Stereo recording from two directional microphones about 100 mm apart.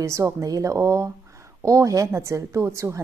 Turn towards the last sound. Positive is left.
turn(degrees=-30)  # may be behind; listen again after turning